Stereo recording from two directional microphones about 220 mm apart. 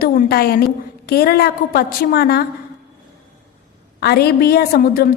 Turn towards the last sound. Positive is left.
turn(degrees=40)  # may be behind; listen again after turning